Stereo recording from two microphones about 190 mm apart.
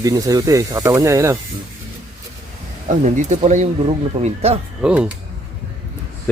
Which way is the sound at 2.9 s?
40° right (ahead or behind).